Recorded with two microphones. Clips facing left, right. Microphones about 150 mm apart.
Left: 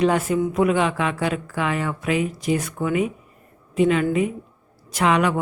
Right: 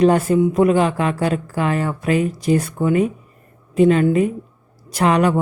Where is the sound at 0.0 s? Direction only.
40° right (ahead or behind).